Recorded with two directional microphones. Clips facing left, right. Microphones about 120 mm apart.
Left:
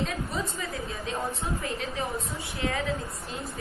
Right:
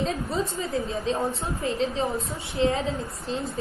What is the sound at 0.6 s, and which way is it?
A woman's voice, 30° right (ahead or behind).